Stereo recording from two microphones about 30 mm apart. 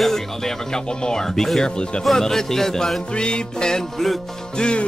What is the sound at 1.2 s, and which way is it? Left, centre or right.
Speech, centre.